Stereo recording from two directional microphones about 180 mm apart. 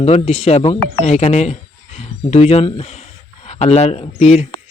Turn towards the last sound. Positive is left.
turn(degrees=35)  # may be behind; listen again after turning